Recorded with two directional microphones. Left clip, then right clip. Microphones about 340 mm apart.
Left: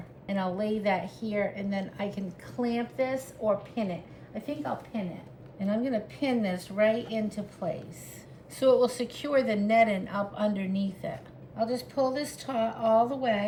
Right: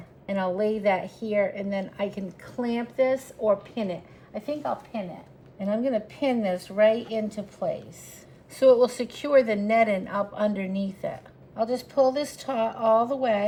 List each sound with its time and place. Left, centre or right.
0.3 s a woman's voice: right